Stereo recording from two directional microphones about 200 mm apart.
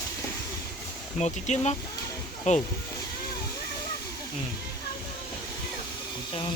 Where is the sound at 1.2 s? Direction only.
35° left (ahead or behind).